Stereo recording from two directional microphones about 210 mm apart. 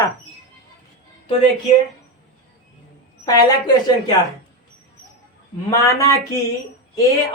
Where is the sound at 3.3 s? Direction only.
20° left (ahead or behind).